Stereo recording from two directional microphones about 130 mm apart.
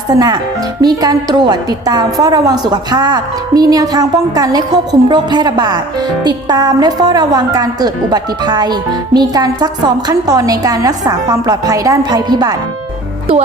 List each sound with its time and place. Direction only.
0.8 s a woman's voice: 30° right (ahead or behind)